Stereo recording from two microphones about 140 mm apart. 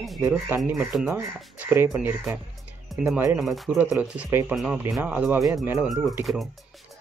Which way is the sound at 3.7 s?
10° right (ahead or behind).